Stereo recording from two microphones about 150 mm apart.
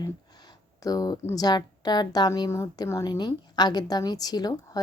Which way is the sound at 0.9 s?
25° left (ahead or behind).